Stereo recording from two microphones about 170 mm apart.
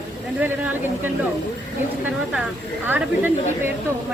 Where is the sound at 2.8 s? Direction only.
10° right (ahead or behind).